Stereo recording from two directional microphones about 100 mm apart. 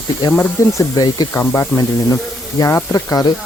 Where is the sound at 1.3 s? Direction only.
25° left (ahead or behind).